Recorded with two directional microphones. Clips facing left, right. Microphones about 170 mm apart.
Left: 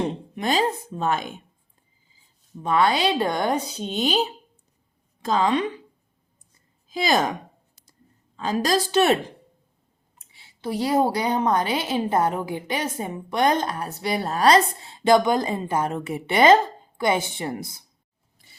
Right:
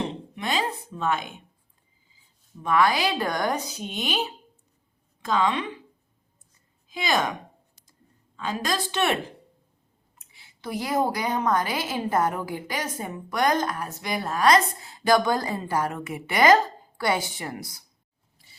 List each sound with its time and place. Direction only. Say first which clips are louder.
0.3 s speech: left 5 dB; 40° left (ahead or behind)
2.6 s a woman's voice: left 2 dB; 25° left (ahead or behind)
5.2 s speech: left 3 dB; 35° left (ahead or behind)
6.9 s speech: left 4 dB; 35° left (ahead or behind)
8.4 s speech: left 6 dB; 35° left (ahead or behind)
10.2 s a woman's voice: left 4 dB; 30° left (ahead or behind)